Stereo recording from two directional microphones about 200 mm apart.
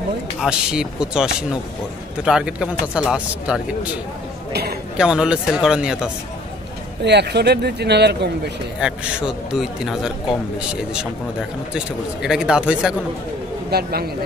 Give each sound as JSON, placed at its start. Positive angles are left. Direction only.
{"t": 0.4, "sound": "speech", "side_deg": -5}
{"t": 4.5, "sound": "a sound", "side_deg": -50}
{"t": 4.9, "sound": "speech", "side_deg": -5}
{"t": 7.0, "sound": "speech", "side_deg": -55}
{"t": 8.8, "sound": "speech", "side_deg": -5}
{"t": 12.2, "sound": "speech", "side_deg": -5}
{"t": 13.7, "sound": "speech", "side_deg": -50}